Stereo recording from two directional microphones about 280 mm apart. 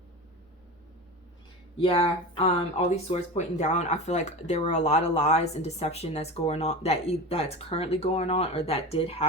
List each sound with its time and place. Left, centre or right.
1.8 s speech: centre